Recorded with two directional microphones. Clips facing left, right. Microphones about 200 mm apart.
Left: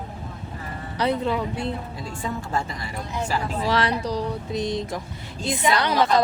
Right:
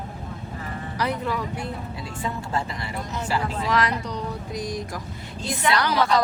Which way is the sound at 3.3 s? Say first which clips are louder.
Even; 30° left (ahead or behind).